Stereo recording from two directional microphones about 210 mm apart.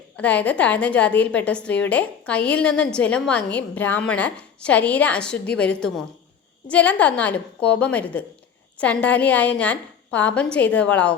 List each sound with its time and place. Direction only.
0.2 s a woman's voice: 5° left (ahead or behind)